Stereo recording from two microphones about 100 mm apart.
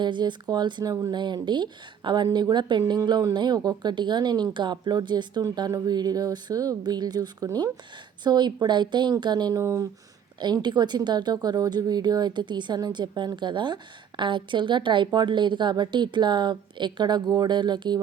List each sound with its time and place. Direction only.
0.0 s a woman's voice: 50° right (ahead or behind)
9.6 s speech: 30° right (ahead or behind)
10.4 s a woman's voice: 45° right (ahead or behind)